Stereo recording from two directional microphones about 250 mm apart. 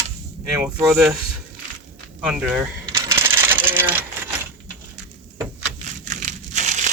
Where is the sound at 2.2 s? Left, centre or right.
Centre.